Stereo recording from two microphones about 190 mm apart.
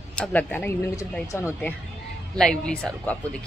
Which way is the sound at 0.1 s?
5° left (ahead or behind).